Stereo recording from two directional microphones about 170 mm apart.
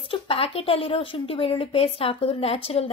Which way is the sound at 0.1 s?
35° left (ahead or behind).